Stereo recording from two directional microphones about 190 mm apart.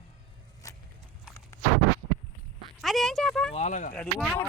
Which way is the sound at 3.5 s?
35° left (ahead or behind).